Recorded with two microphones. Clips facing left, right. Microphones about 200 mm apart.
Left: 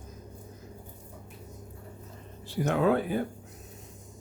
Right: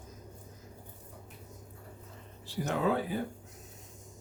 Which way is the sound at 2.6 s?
60° left (ahead or behind).